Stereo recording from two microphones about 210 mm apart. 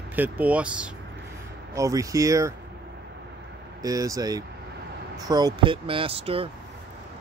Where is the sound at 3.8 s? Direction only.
15° right (ahead or behind).